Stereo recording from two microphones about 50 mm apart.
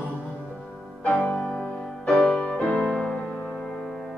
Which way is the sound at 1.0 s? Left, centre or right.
Centre.